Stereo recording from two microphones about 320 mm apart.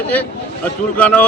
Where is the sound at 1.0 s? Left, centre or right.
Centre.